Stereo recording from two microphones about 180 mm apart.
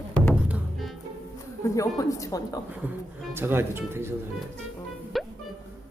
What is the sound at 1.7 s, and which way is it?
Speech, 20° left (ahead or behind).